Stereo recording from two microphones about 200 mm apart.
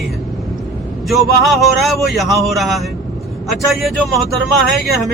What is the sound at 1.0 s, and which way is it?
Speech, centre (ahead or behind).